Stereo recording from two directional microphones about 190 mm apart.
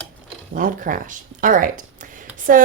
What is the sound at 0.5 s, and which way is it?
Speech, 45° right (ahead or behind).